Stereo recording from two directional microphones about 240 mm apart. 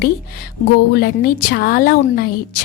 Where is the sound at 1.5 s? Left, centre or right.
Left.